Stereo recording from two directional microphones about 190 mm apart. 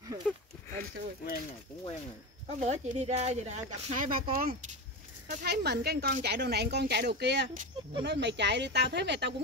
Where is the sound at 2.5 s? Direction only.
35° right (ahead or behind).